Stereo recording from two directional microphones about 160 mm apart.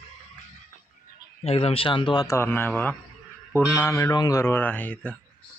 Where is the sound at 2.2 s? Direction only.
15° left (ahead or behind).